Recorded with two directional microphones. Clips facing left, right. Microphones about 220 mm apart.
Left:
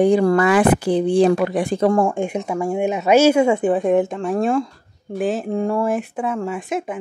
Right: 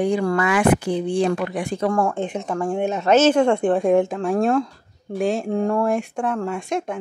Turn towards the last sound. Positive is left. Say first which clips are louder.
# left 1 dB
turn(degrees=5)  # may be behind; listen again after turning